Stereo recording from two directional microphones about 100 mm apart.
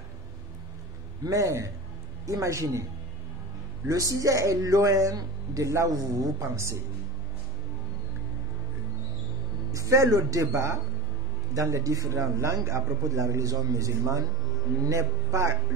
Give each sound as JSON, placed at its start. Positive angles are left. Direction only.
{"t": 1.2, "sound": "a man's voice", "side_deg": -35}
{"t": 3.8, "sound": "a man's voice", "side_deg": -35}
{"t": 9.7, "sound": "a man's voice", "side_deg": -30}